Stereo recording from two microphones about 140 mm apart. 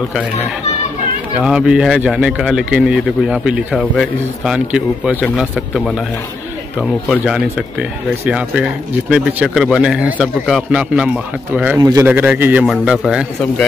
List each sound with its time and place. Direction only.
1.4 s a man's voice: 5° right (ahead or behind)
11.8 s a man's voice: 25° right (ahead or behind)
12.1 s a man's voice: 10° right (ahead or behind)